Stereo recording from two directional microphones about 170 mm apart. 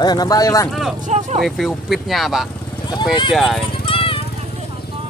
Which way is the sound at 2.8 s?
25° left (ahead or behind).